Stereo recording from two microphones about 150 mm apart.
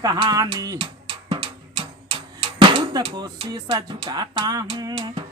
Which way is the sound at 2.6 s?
35° right (ahead or behind).